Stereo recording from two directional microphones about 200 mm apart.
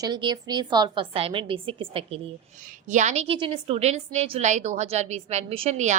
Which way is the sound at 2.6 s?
40° right (ahead or behind).